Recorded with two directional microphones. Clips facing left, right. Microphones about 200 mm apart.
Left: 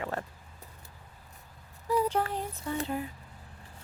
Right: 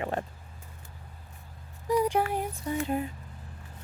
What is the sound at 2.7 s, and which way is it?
Speech, 15° right (ahead or behind).